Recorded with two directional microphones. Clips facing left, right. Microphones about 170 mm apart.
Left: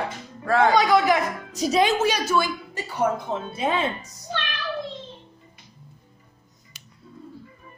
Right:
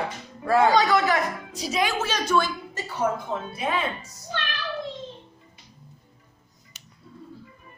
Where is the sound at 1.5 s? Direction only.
40° left (ahead or behind).